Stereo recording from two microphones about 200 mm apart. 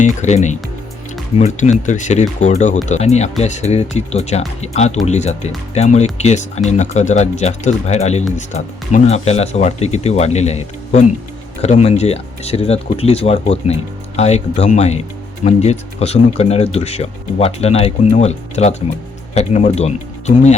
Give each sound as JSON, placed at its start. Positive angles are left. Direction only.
{"t": 0.0, "sound": "speech", "side_deg": 35}